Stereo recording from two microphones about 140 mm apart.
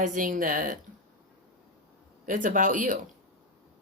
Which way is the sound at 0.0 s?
70° right (ahead or behind).